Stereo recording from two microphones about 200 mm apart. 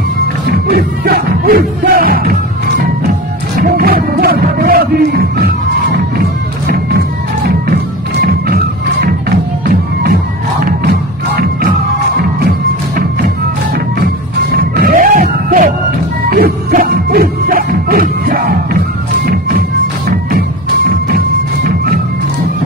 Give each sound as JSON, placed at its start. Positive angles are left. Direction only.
{"t": 0.5, "sound": "music", "side_deg": -50}
{"t": 3.5, "sound": "music", "side_deg": -50}
{"t": 7.4, "sound": "music", "side_deg": -50}
{"t": 10.6, "sound": "music", "side_deg": -50}
{"t": 14.6, "sound": "music", "side_deg": -45}
{"t": 20.1, "sound": "music", "side_deg": -45}
{"t": 21.6, "sound": "music", "side_deg": -45}